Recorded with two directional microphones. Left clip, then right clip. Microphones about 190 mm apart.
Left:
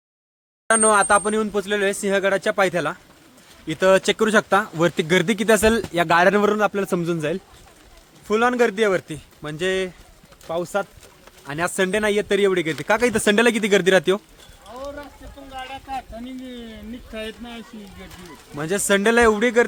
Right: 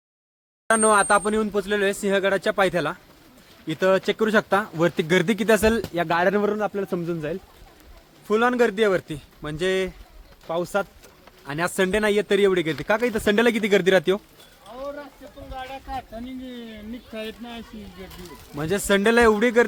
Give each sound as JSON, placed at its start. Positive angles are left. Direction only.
{"t": 0.7, "sound": "speech", "side_deg": 0}
{"t": 3.8, "sound": "a man's voice", "side_deg": 45}
{"t": 4.2, "sound": "speech", "side_deg": 20}
{"t": 5.9, "sound": "a man's voice", "side_deg": 25}
{"t": 8.3, "sound": "speech", "side_deg": 5}
{"t": 13.0, "sound": "a man's voice", "side_deg": 50}
{"t": 13.2, "sound": "speech", "side_deg": 15}
{"t": 14.7, "sound": "a sound", "side_deg": 0}
{"t": 15.5, "sound": "speech", "side_deg": 0}